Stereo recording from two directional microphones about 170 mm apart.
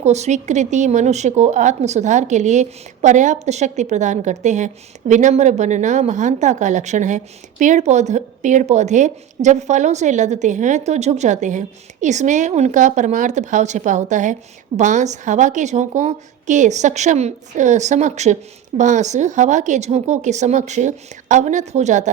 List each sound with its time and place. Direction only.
0.0 s speech: 40° right (ahead or behind)